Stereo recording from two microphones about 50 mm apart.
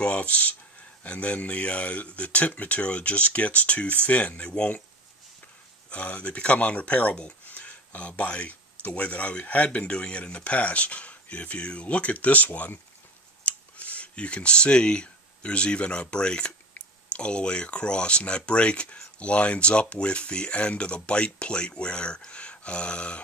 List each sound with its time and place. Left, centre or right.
0.0 s speech: left
5.9 s speech: left
7.4 s a sound: left
8.8 s speech: left